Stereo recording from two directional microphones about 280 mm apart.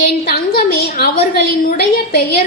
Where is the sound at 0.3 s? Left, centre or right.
Left.